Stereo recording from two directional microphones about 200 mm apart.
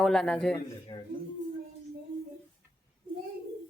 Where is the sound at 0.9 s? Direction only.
20° left (ahead or behind).